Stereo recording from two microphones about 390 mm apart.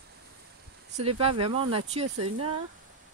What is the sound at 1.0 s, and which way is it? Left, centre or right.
Speech, centre.